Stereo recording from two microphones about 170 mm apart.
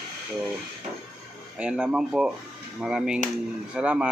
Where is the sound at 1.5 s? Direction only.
5° right (ahead or behind).